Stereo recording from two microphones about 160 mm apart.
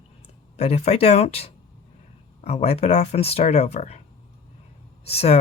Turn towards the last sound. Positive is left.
turn(degrees=40)  # may be behind; listen again after turning